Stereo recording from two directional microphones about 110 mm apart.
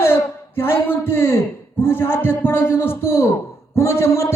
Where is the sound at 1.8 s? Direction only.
20° left (ahead or behind).